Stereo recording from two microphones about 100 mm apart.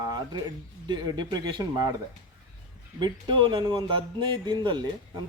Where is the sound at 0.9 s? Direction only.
45° right (ahead or behind).